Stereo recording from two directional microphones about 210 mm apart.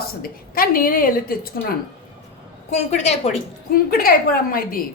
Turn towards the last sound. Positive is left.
turn(degrees=45)  # may be behind; listen again after turning